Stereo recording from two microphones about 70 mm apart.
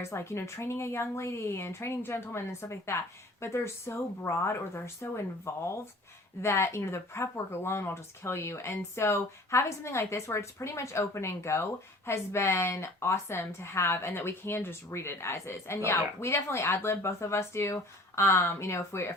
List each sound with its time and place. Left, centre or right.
0.0 s speech: left